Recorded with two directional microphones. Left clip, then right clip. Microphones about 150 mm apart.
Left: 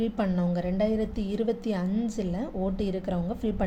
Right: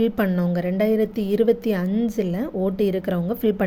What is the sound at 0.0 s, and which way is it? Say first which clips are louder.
A woman's voice: right 7 dB; 35° right (ahead or behind).